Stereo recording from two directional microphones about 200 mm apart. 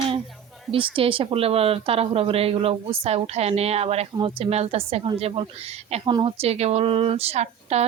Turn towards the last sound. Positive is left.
turn(degrees=-30)  # may be behind; listen again after turning